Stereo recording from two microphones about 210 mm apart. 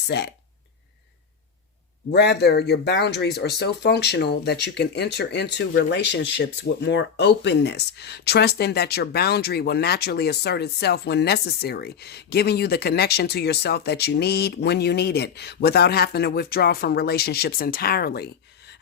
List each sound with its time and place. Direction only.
0.1 s speech: 55° left (ahead or behind)
2.1 s speech: 55° left (ahead or behind)